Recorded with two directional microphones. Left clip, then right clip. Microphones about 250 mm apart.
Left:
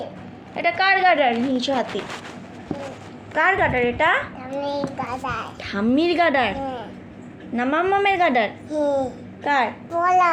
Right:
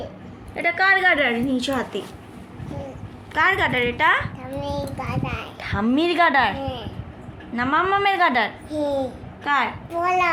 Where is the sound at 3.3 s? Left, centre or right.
Right.